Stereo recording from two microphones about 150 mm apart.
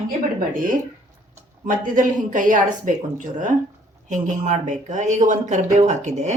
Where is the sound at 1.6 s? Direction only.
60° right (ahead or behind).